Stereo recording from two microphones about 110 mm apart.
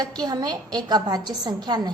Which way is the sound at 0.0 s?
35° right (ahead or behind).